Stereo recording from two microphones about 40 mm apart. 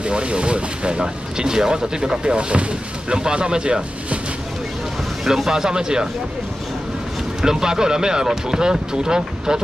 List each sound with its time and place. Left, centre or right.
0.0 s speech: right
5.2 s speech: centre
5.5 s speech: centre
7.4 s speech: centre